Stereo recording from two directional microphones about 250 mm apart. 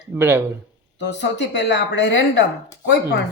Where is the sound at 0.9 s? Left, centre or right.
Left.